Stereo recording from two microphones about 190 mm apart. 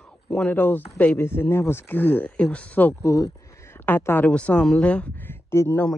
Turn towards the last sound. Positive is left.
turn(degrees=10)  # may be behind; listen again after turning